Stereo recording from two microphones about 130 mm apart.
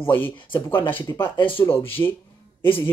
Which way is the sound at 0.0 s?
15° left (ahead or behind).